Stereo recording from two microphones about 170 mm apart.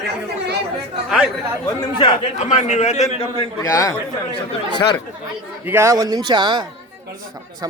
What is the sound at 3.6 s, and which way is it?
Speech, 20° left (ahead or behind).